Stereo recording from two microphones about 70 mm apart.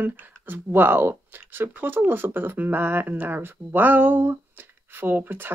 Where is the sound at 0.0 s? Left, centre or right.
Right.